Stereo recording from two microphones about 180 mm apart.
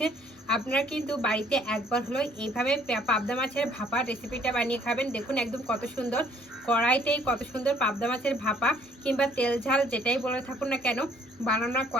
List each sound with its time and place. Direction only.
0.0 s a woman's voice: 5° left (ahead or behind)